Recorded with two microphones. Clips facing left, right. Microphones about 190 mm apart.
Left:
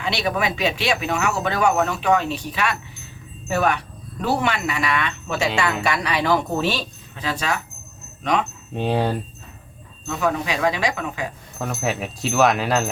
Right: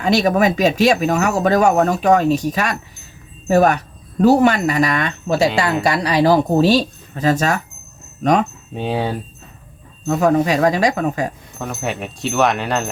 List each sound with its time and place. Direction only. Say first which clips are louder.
0.0 s speech: right 8 dB; 45° right (ahead or behind)
8.7 s speech: left 1 dB; centre (ahead or behind)
10.1 s speech: right 8 dB; 45° right (ahead or behind)
11.6 s speech: right 1 dB; centre (ahead or behind)